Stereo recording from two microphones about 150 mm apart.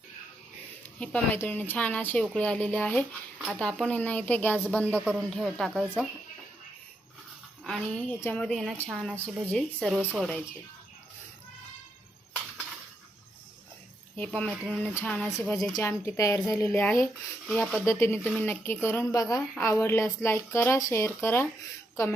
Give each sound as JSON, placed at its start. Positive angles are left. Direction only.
{"t": 0.9, "sound": "speech", "side_deg": 10}
{"t": 4.9, "sound": "speech", "side_deg": -10}
{"t": 5.3, "sound": "a woman's voice", "side_deg": 5}
{"t": 7.6, "sound": "a woman's voice", "side_deg": 5}
{"t": 14.2, "sound": "a woman's voice", "side_deg": 10}
{"t": 15.7, "sound": "a woman's voice", "side_deg": 15}
{"t": 17.8, "sound": "speech", "side_deg": 15}